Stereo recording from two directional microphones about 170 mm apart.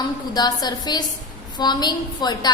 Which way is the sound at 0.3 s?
25° left (ahead or behind).